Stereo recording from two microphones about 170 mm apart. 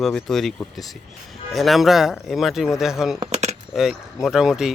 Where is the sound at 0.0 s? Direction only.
Centre (ahead or behind).